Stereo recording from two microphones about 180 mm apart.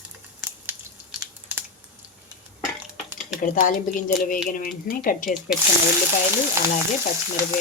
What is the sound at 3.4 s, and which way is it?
Speech, 50° left (ahead or behind).